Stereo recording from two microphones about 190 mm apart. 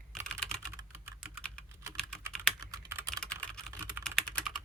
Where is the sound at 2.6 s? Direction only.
15° right (ahead or behind).